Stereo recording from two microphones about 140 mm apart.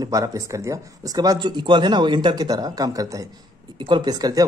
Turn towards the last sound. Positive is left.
turn(degrees=-25)  # may be behind; listen again after turning